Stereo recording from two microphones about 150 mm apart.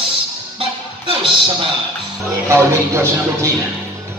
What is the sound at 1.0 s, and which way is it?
Speech, 35° right (ahead or behind).